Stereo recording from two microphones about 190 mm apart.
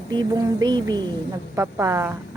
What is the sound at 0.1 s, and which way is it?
A woman's voice, 20° right (ahead or behind).